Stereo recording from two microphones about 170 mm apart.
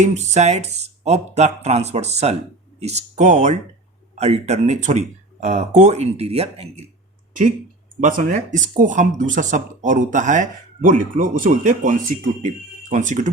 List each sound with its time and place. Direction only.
0.0 s speech: 40° right (ahead or behind)
8.0 s speech: 50° right (ahead or behind)